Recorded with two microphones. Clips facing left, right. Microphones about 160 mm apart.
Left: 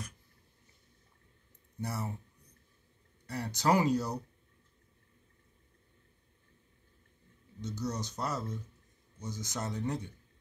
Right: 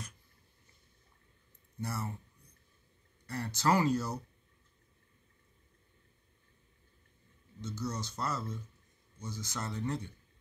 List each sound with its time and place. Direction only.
1.8 s speech: 15° left (ahead or behind)
3.3 s speech: 15° left (ahead or behind)
7.6 s speech: 15° left (ahead or behind)